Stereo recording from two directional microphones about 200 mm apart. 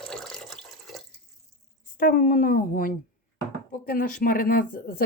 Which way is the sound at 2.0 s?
45° left (ahead or behind).